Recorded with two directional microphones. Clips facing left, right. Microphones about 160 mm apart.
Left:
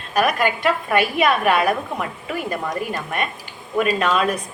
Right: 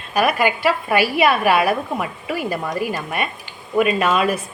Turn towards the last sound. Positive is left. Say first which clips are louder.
# right 1 dB
turn(degrees=-5)  # may be behind; listen again after turning